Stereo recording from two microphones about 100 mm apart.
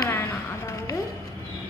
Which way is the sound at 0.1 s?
25° left (ahead or behind).